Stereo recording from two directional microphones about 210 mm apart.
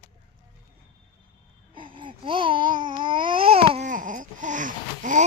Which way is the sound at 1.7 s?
25° right (ahead or behind).